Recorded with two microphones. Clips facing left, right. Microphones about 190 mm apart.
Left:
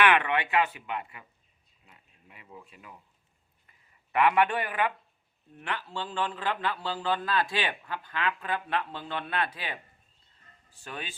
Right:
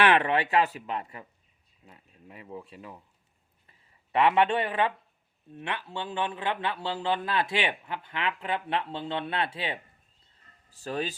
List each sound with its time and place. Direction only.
0.0 s speech: 35° right (ahead or behind)
3.7 s a sound: 25° right (ahead or behind)
5.5 s a man's voice: 20° right (ahead or behind)
10.7 s speech: 35° right (ahead or behind)